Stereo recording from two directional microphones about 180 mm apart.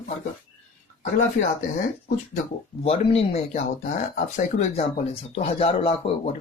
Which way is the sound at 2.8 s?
35° left (ahead or behind).